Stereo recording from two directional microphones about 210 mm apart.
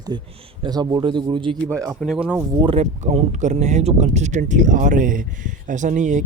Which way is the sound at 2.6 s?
30° right (ahead or behind).